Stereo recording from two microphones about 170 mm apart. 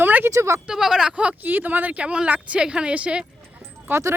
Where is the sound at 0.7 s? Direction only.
5° right (ahead or behind).